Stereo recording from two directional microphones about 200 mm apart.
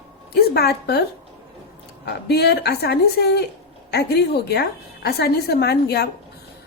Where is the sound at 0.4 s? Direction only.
55° left (ahead or behind).